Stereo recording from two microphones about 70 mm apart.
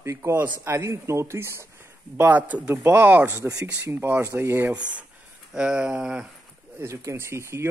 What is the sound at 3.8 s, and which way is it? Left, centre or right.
Speech, right.